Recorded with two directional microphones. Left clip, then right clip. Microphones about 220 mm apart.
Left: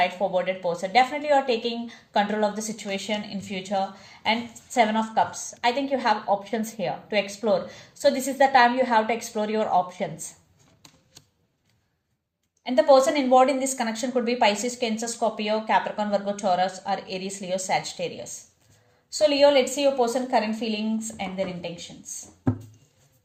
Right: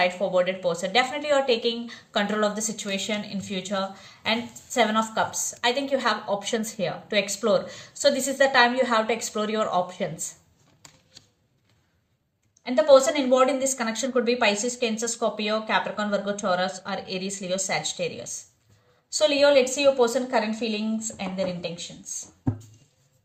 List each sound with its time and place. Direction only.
0.0 s a woman's voice: 25° right (ahead or behind)
12.6 s a woman's voice: 25° right (ahead or behind)
19.2 s a woman's voice: 25° right (ahead or behind)
20.7 s a woman's voice: 25° right (ahead or behind)